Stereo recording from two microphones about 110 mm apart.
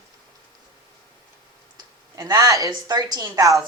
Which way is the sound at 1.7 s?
35° right (ahead or behind).